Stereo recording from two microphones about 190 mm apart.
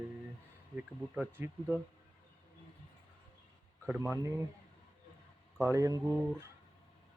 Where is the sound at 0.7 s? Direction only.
10° right (ahead or behind).